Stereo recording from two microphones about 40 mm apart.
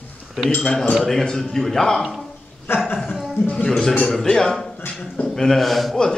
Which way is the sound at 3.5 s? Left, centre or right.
Centre.